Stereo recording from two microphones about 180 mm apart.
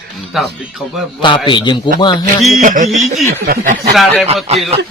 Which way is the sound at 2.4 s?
Centre (ahead or behind).